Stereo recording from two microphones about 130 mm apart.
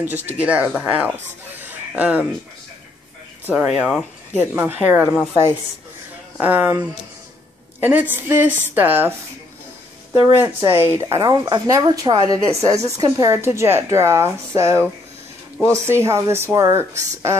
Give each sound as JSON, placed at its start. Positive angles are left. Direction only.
{"t": 0.4, "sound": "speech", "side_deg": -10}
{"t": 3.4, "sound": "speech", "side_deg": -10}
{"t": 6.4, "sound": "speech", "side_deg": -15}
{"t": 10.1, "sound": "a woman's voice", "side_deg": -20}